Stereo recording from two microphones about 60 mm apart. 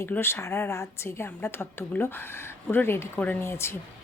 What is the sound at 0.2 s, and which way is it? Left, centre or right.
A woman's voice, left.